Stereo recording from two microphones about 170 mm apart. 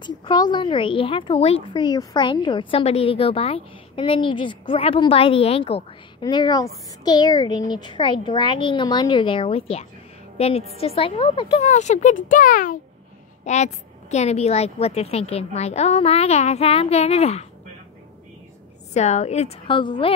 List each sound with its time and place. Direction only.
0.0 s a woman's voice: 25° left (ahead or behind)
18.9 s a woman's voice: 40° left (ahead or behind)